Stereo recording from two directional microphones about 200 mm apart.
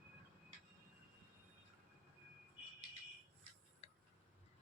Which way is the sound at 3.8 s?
30° left (ahead or behind).